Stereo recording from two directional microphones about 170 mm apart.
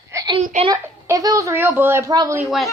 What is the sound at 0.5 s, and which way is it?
Speech, 45° right (ahead or behind).